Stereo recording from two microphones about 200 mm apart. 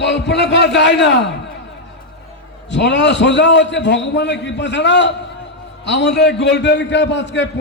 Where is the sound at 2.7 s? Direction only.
60° left (ahead or behind).